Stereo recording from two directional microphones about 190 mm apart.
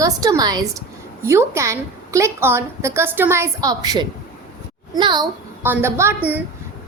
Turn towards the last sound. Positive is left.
turn(degrees=-10)  # may be behind; listen again after turning